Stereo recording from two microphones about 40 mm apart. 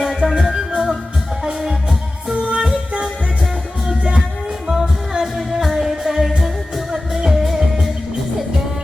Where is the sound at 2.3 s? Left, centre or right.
Right.